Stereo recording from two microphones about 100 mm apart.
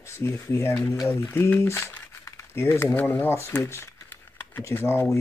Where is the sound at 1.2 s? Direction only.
20° left (ahead or behind).